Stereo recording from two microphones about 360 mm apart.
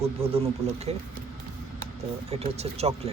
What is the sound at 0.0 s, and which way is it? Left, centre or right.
Speech, centre.